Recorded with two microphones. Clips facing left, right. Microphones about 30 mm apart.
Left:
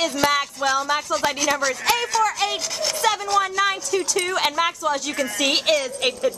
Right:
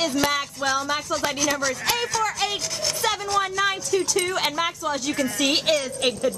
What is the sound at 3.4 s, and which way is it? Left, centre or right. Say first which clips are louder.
Speech: left 2 dB; centre.